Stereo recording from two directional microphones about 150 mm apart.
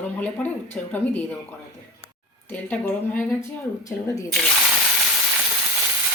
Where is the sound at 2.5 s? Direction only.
10° left (ahead or behind).